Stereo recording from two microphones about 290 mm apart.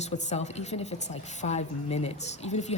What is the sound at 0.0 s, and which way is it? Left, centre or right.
A woman's voice, left.